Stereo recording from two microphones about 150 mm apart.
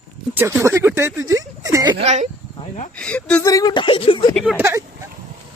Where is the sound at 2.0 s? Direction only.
50° right (ahead or behind).